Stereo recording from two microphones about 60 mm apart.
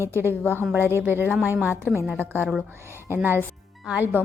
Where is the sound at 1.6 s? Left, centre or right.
Right.